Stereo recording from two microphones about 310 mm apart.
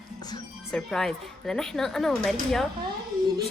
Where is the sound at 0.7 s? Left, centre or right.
Centre.